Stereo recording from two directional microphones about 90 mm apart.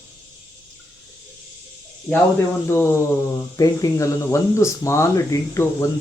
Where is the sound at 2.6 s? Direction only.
25° left (ahead or behind).